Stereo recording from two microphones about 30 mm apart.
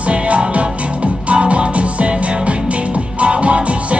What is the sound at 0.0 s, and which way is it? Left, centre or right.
Music, right.